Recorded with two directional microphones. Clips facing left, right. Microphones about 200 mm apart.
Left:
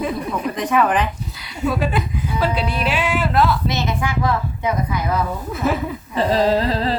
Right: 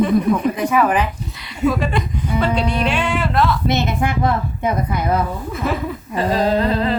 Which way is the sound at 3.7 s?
55° right (ahead or behind).